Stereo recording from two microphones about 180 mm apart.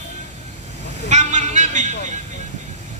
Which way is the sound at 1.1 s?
40° right (ahead or behind).